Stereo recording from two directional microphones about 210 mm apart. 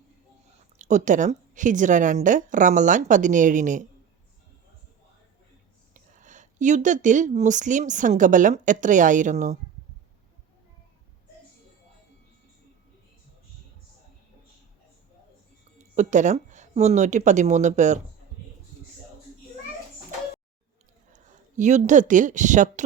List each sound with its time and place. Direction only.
0.8 s a woman's voice: 35° right (ahead or behind)
5.9 s a woman's voice: 35° right (ahead or behind)
15.8 s speech: 35° right (ahead or behind)
21.1 s a woman's voice: 35° right (ahead or behind)